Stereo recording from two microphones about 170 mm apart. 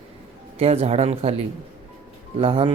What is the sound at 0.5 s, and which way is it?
Speech, 35° right (ahead or behind).